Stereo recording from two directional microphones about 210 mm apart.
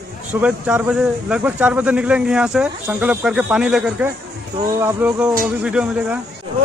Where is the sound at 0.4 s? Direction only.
5° right (ahead or behind).